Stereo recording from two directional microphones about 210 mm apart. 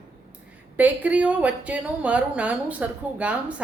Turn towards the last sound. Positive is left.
turn(degrees=-5)  # may be behind; listen again after turning